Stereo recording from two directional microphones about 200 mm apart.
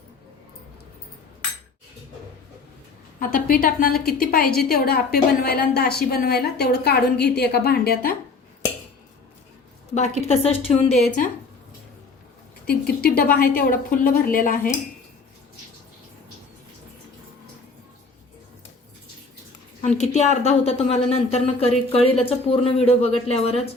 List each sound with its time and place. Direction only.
3.2 s a woman's voice: 45° left (ahead or behind)
10.2 s speech: 30° left (ahead or behind)
12.6 s a woman's voice: 50° left (ahead or behind)
19.8 s speech: 35° left (ahead or behind)